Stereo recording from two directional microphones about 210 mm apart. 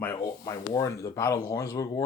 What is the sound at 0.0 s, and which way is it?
Speech, 15° left (ahead or behind).